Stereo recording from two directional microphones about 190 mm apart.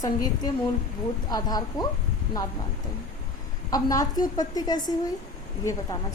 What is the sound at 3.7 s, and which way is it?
A woman's voice, 20° left (ahead or behind).